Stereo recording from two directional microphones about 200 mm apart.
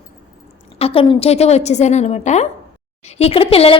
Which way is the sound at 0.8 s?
30° left (ahead or behind).